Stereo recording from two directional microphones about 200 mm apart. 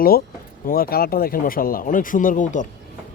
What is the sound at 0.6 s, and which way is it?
Speech, 45° left (ahead or behind).